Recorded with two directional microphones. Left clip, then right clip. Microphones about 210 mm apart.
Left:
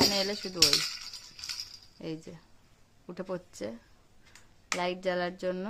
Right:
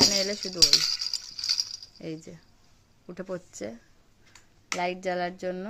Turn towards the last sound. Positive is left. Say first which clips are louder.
# right 1 dB
turn(degrees=0)  # may be behind; listen again after turning